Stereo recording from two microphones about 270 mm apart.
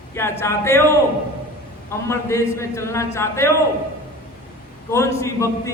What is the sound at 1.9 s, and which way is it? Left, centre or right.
A man's voice, centre.